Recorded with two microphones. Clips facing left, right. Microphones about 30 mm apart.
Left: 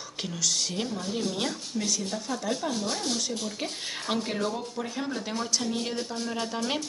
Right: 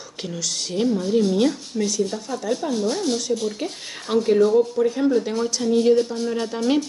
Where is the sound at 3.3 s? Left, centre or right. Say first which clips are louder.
Right 10 dB; centre.